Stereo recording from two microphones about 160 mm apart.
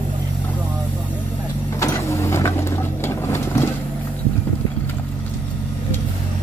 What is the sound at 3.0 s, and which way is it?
Vehicle, 15° left (ahead or behind).